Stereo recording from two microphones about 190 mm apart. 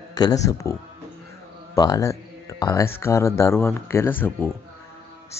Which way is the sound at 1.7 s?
20° left (ahead or behind).